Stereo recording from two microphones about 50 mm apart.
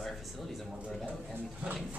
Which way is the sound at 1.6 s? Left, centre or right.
Right.